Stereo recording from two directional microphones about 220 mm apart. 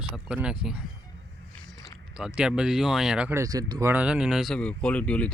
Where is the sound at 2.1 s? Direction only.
5° right (ahead or behind).